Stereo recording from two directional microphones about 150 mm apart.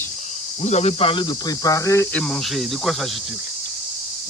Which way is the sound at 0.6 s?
45° left (ahead or behind).